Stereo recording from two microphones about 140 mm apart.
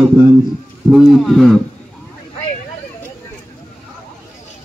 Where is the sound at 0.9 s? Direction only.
5° right (ahead or behind).